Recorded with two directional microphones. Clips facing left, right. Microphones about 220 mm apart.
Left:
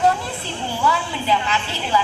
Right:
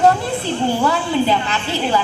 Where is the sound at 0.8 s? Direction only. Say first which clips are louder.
Even; 50° right (ahead or behind).